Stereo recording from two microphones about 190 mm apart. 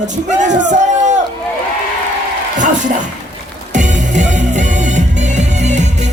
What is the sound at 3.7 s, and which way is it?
Music, 40° right (ahead or behind).